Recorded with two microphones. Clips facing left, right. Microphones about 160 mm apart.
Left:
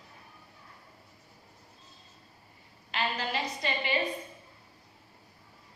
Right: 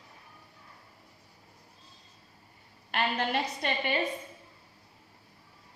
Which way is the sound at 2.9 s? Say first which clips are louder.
Right 3 dB; 55° right (ahead or behind).